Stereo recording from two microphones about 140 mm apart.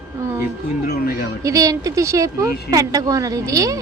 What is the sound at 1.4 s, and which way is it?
A woman's voice, 25° right (ahead or behind).